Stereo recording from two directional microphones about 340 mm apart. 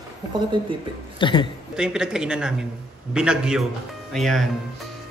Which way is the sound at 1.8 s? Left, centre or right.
Centre.